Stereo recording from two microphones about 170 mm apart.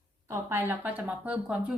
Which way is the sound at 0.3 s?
15° right (ahead or behind).